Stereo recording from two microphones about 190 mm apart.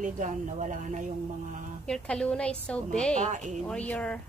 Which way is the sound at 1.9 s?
5° left (ahead or behind).